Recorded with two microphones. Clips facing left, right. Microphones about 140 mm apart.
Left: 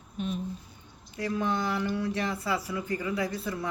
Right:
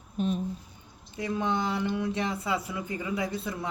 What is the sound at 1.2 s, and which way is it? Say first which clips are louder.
Speech: even; 20° right (ahead or behind).